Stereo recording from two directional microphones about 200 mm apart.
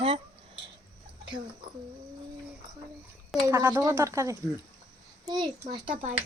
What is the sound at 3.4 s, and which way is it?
A child's voice, 15° right (ahead or behind).